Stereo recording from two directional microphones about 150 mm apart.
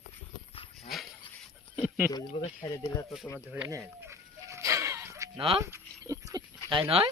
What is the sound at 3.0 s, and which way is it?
Speech, centre (ahead or behind).